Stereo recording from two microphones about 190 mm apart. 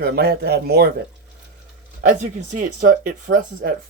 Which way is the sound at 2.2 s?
40° right (ahead or behind).